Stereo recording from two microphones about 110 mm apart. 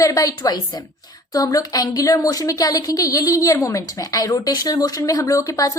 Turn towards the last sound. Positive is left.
turn(degrees=30)  # may be behind; listen again after turning